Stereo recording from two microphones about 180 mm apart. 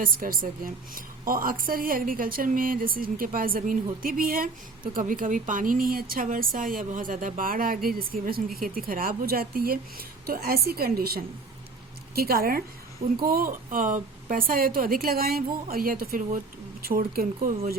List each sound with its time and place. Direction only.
0.0 s a woman's voice: 50° right (ahead or behind)